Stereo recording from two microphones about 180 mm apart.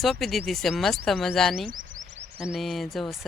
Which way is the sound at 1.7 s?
50° right (ahead or behind).